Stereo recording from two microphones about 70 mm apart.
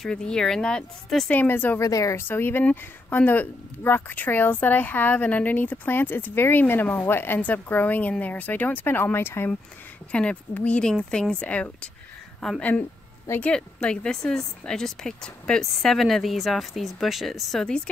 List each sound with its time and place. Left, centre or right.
0.0 s speech: centre
1.3 s a woman's voice: left
1.8 s speech: left
2.1 s a woman's voice: left
10.1 s speech: centre